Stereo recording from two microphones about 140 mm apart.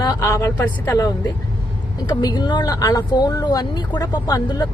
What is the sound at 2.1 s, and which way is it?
Speech, 30° left (ahead or behind).